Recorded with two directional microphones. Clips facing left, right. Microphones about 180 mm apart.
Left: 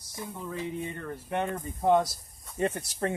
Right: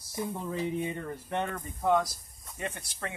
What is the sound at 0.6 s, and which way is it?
Speech, 10° right (ahead or behind).